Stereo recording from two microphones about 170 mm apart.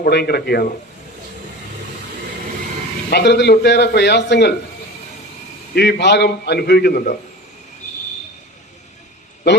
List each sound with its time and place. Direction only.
0.0 s a man's voice: 70° left (ahead or behind)
3.1 s speech: 85° left
5.7 s a man's voice: 80° left; by 7.2 s 60° left (ahead or behind)